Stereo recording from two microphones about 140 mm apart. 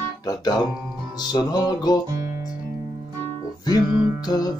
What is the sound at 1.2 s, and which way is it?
Music, 30° left (ahead or behind).